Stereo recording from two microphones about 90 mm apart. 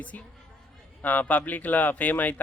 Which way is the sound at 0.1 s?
15° left (ahead or behind).